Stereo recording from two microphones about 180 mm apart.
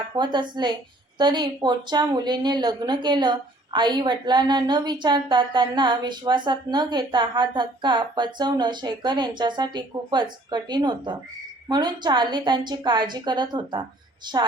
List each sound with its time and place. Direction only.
0.2 s speech: 25° right (ahead or behind)